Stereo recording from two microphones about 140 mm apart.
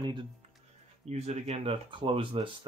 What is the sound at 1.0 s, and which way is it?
Speech, 55° right (ahead or behind).